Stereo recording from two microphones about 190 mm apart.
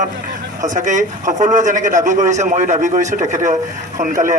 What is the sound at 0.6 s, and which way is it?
A man's voice, 40° right (ahead or behind).